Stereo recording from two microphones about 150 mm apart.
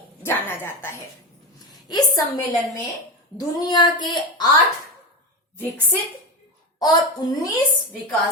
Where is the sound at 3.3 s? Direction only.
25° left (ahead or behind).